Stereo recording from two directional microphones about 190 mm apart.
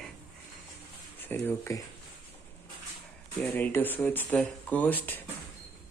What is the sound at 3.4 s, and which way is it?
Speech, 10° left (ahead or behind).